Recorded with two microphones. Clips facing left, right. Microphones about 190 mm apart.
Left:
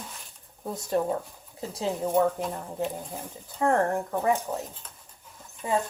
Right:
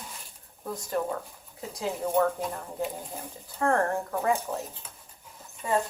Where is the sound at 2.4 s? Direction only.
10° right (ahead or behind).